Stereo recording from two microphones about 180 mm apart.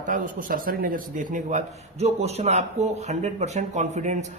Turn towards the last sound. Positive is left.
turn(degrees=-40)  # may be behind; listen again after turning